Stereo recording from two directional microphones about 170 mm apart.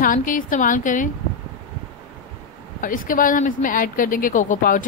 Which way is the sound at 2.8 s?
55° left (ahead or behind).